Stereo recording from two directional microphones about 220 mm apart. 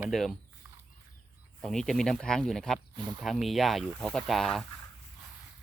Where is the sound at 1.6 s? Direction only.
Centre (ahead or behind).